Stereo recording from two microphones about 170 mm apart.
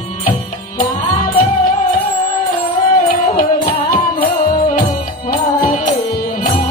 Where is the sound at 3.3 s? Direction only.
60° left (ahead or behind).